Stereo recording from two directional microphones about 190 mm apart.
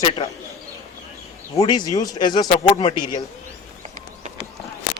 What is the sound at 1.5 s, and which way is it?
Speech, 20° left (ahead or behind).